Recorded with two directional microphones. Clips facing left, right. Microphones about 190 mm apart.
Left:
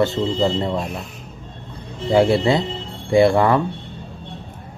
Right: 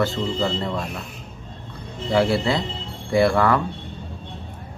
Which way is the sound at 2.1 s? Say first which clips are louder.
Left 4 dB; 20° left (ahead or behind).